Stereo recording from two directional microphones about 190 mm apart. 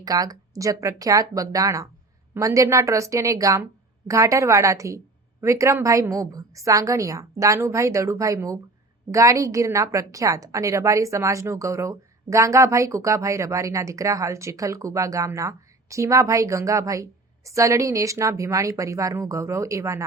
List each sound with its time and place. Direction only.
0.0 s a woman's voice: 20° right (ahead or behind)